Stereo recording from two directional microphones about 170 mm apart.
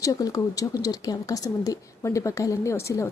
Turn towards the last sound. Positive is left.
turn(degrees=15)  # may be behind; listen again after turning